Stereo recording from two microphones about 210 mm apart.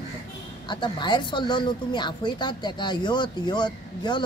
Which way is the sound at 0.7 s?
20° left (ahead or behind).